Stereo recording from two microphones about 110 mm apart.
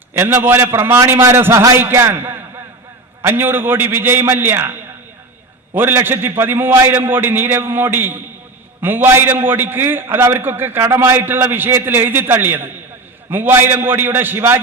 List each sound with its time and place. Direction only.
0.1 s a man's voice: 20° right (ahead or behind)
5.7 s a man's voice: 20° right (ahead or behind)